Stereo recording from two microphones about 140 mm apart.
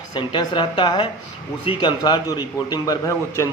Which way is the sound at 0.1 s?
35° left (ahead or behind).